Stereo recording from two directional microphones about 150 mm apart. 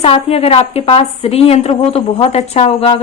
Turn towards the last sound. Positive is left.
turn(degrees=40)  # may be behind; listen again after turning